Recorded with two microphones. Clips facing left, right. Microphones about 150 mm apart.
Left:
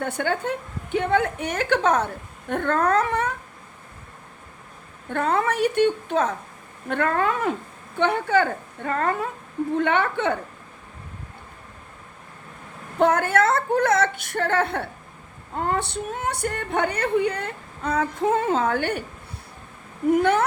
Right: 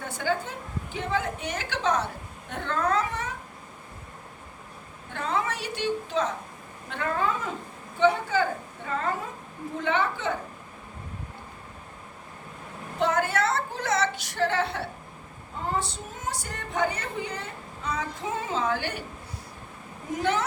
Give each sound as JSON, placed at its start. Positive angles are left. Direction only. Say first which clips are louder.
{"t": 0.0, "sound": "speech", "louder": "left 4 dB", "side_deg": 65}
{"t": 5.0, "sound": "speech", "louder": "left 7 dB", "side_deg": 55}
{"t": 13.0, "sound": "speech", "louder": "left 6 dB", "side_deg": 55}
{"t": 15.5, "sound": "speech", "louder": "left 5 dB", "side_deg": 65}
{"t": 20.1, "sound": "speech", "louder": "left 8 dB", "side_deg": 60}